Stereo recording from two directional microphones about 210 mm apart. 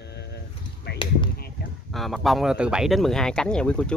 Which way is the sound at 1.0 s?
25° left (ahead or behind).